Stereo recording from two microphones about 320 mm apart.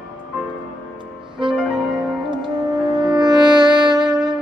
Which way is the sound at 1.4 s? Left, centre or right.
Centre.